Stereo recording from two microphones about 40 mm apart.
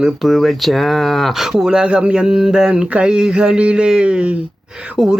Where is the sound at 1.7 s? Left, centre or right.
Right.